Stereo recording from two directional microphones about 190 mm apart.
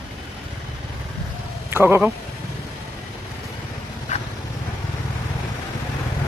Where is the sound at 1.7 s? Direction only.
10° right (ahead or behind).